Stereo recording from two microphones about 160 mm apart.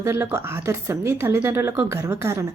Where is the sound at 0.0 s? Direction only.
15° right (ahead or behind).